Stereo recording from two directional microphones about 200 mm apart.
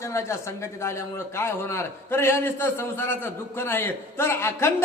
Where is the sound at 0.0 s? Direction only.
15° left (ahead or behind).